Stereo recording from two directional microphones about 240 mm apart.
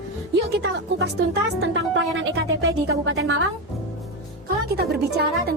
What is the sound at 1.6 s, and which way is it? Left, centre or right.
Music, right.